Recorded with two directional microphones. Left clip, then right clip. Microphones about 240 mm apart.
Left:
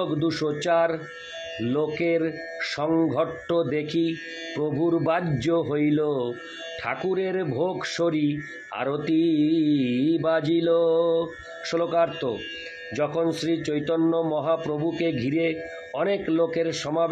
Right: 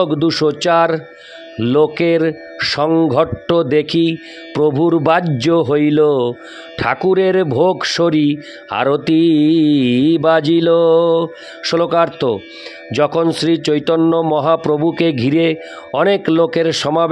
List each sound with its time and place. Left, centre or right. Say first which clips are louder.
0.0 s speech: right 11 dB; right